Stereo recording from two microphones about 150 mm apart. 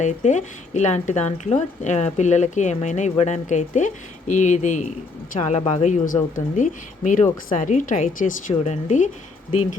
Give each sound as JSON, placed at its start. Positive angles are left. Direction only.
{"t": 0.0, "sound": "a woman's voice", "side_deg": 55}